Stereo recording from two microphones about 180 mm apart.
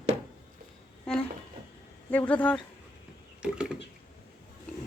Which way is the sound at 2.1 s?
10° left (ahead or behind).